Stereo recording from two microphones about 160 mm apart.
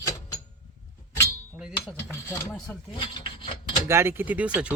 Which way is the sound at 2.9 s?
30° left (ahead or behind).